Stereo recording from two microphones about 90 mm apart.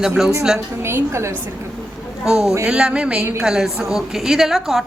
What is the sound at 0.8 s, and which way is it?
Speech, 30° right (ahead or behind).